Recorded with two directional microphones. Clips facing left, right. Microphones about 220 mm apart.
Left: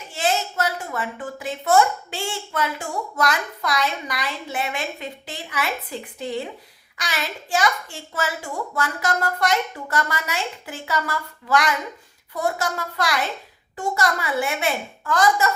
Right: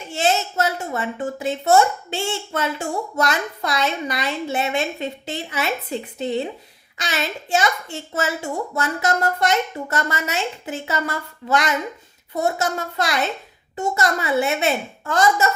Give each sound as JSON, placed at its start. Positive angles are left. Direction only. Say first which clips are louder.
{"t": 0.1, "sound": "a woman's voice", "louder": "right 3 dB", "side_deg": -25}